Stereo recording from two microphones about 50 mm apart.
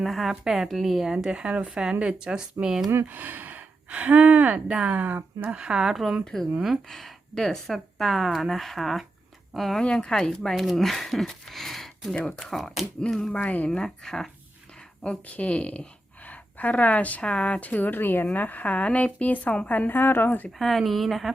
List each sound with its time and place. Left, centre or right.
0.0 s speech: centre
1.0 s speech: centre
3.1 s speech: right
3.8 s speech: right
5.5 s speech: centre
6.2 s speech: centre
9.8 s speech: centre
13.3 s speech: left
13.7 s speech: centre
15.3 s speech: left
20.0 s speech: left
20.6 s speech: centre